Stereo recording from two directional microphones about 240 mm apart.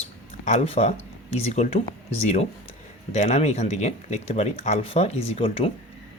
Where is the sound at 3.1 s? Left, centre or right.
Left.